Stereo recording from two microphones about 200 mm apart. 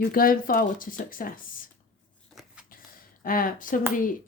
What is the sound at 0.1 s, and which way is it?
Speech, 45° left (ahead or behind).